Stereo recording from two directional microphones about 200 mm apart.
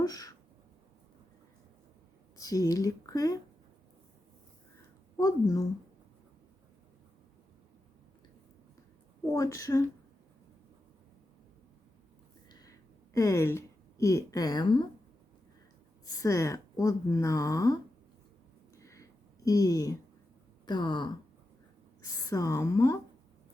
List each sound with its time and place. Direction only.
0.0 s a sound: 20° left (ahead or behind)
2.4 s speech: 15° left (ahead or behind)
5.1 s speech: 15° left (ahead or behind)
9.3 s speech: 15° left (ahead or behind)
13.1 s a woman's voice: 15° left (ahead or behind)
16.0 s speech: 15° left (ahead or behind)
18.8 s a sound: 15° left (ahead or behind)
19.5 s speech: 15° left (ahead or behind)
22.3 s speech: 15° left (ahead or behind)